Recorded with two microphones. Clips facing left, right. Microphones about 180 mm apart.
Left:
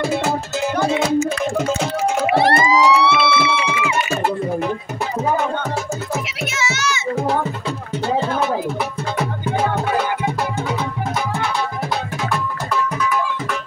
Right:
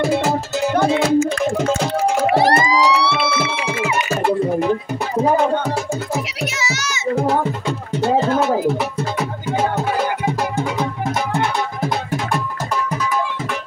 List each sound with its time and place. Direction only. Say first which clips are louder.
2.3 s emergency vehicle: left 2 dB; 35° right (ahead or behind)
3.3 s music: left 2 dB; 45° right (ahead or behind)
6.1 s music: right 1 dB; 35° right (ahead or behind)